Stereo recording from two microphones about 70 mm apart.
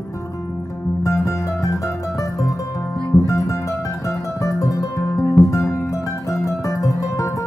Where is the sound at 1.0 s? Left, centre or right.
Left.